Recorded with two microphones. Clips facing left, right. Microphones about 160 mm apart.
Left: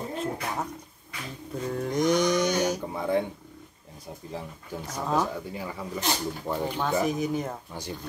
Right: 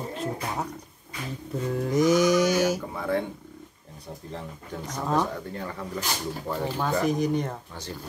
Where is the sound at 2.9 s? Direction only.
20° left (ahead or behind).